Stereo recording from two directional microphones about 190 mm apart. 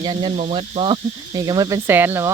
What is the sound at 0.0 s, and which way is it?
Cricket, 25° right (ahead or behind).